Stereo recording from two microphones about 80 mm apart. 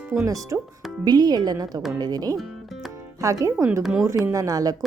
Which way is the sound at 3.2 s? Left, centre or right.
Right.